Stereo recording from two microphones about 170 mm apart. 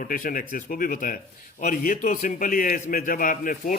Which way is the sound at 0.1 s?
55° left (ahead or behind).